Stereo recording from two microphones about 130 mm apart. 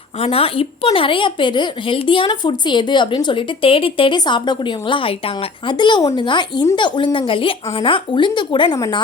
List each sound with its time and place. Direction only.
0.2 s a woman's voice: 50° left (ahead or behind)